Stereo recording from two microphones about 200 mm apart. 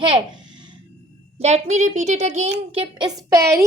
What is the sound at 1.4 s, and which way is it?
A woman's voice, 35° right (ahead or behind).